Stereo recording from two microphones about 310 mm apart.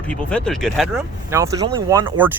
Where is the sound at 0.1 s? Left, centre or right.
Centre.